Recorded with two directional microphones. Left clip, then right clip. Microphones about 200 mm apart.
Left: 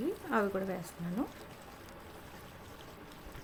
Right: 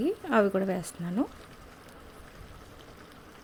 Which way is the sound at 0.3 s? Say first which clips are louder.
Right 8 dB; 40° right (ahead or behind).